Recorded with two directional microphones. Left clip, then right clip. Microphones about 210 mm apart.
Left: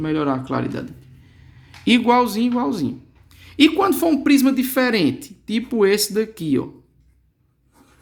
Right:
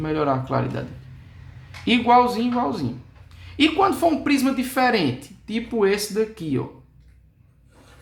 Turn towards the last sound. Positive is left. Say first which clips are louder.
# left 3 dB
turn(degrees=45)  # may be behind; listen again after turning